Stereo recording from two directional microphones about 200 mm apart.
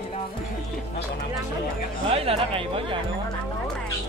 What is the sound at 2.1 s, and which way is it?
Speech, 30° right (ahead or behind).